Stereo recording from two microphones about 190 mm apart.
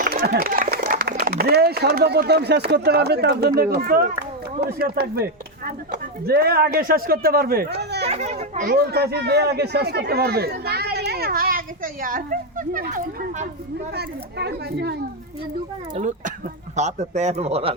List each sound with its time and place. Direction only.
0.0 s speech: 45° right (ahead or behind)
8.0 s a child's voice: 35° right (ahead or behind)
8.7 s speech: 60° right (ahead or behind); by 13.5 s 40° right (ahead or behind)
13.9 s speech: 60° right (ahead or behind)
16.0 s a man's voice: 40° right (ahead or behind)